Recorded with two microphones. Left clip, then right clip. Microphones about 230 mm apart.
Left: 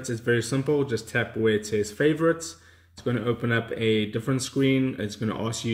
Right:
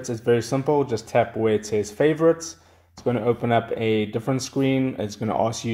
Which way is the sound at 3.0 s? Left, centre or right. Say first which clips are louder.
Right 5 dB; right.